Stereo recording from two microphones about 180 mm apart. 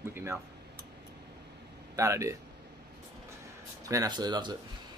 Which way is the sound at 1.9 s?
15° right (ahead or behind).